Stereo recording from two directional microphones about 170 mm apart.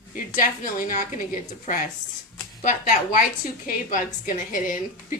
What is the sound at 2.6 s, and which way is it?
A woman's voice, 50° left (ahead or behind).